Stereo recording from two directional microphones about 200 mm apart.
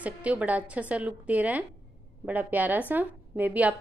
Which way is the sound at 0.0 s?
5° right (ahead or behind).